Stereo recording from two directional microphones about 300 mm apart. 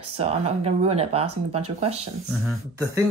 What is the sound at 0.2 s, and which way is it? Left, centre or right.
Speech, right.